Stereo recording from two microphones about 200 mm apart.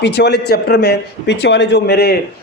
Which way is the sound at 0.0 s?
60° left (ahead or behind).